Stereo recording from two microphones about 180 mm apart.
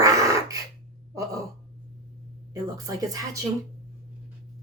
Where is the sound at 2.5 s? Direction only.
20° right (ahead or behind).